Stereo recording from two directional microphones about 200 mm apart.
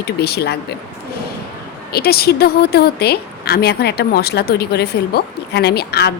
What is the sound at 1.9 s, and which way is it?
A woman's voice, 50° left (ahead or behind).